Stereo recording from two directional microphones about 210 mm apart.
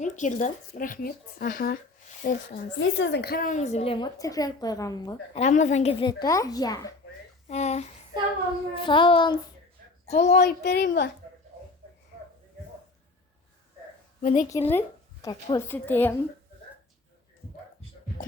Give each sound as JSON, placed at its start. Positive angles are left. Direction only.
{"t": 0.0, "sound": "speech", "side_deg": 35}
{"t": 2.7, "sound": "a woman's voice", "side_deg": 60}
{"t": 5.4, "sound": "a woman's voice", "side_deg": 35}
{"t": 7.4, "sound": "a woman's voice", "side_deg": 30}
{"t": 10.3, "sound": "a child's voice", "side_deg": 50}
{"t": 14.2, "sound": "a woman's voice", "side_deg": 35}
{"t": 14.5, "sound": "a woman's voice", "side_deg": 10}